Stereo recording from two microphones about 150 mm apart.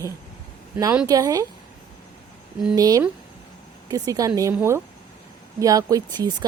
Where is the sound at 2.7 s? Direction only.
25° right (ahead or behind).